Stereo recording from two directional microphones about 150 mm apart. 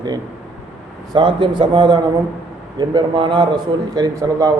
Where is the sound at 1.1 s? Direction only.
35° right (ahead or behind).